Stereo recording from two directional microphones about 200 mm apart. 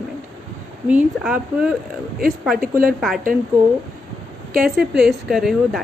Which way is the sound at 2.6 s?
45° right (ahead or behind).